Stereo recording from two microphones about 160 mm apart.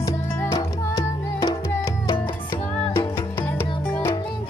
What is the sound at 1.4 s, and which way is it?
Music, 20° left (ahead or behind).